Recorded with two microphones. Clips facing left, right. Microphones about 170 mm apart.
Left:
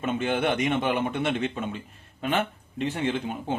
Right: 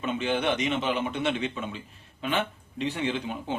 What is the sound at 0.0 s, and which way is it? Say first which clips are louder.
Speech: left 2 dB; 50° left (ahead or behind).